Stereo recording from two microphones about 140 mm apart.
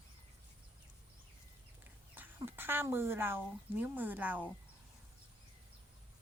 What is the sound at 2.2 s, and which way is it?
Speech, 15° right (ahead or behind).